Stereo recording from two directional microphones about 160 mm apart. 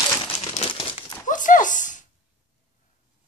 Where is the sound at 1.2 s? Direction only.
55° left (ahead or behind).